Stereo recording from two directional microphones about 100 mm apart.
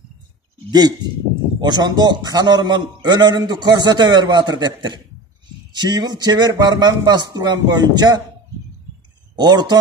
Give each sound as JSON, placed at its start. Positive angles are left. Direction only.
{"t": 0.7, "sound": "a man's voice", "side_deg": -45}
{"t": 9.3, "sound": "a man's voice", "side_deg": -45}